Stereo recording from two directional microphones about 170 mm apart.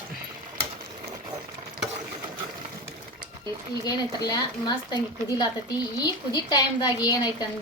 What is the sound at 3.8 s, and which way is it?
A woman's voice, 25° left (ahead or behind).